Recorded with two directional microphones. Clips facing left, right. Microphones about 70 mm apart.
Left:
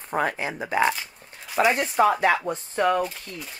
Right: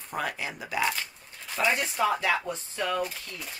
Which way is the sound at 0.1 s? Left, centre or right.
Left.